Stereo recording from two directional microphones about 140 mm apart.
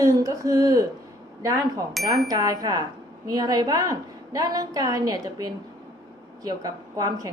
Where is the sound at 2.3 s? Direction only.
25° right (ahead or behind).